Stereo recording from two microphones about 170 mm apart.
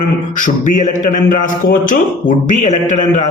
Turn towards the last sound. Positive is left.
turn(degrees=45)  # may be behind; listen again after turning